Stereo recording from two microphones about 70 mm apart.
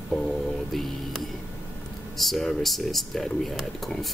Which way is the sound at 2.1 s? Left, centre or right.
Centre.